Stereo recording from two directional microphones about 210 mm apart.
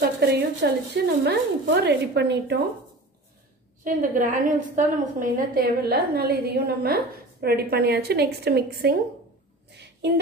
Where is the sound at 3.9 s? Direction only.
40° right (ahead or behind).